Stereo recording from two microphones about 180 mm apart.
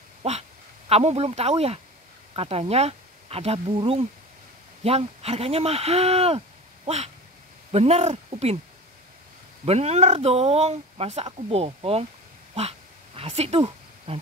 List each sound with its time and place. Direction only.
0.2 s speech: 35° right (ahead or behind)
9.7 s speech: 35° right (ahead or behind)
12.5 s a sound: 35° right (ahead or behind)